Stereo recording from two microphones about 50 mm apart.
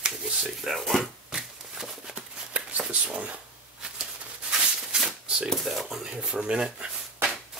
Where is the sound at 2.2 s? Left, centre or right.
Right.